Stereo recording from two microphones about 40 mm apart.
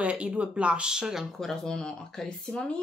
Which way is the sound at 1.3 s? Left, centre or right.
Centre.